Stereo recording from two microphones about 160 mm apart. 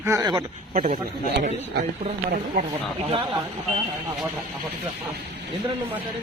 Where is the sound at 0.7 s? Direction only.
55° right (ahead or behind).